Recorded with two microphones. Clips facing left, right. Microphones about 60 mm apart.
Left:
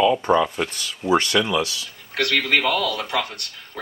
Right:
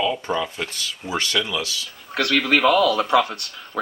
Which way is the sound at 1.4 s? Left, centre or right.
Centre.